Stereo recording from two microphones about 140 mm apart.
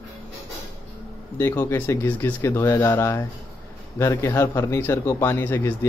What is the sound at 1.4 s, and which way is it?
A man's voice, 20° left (ahead or behind).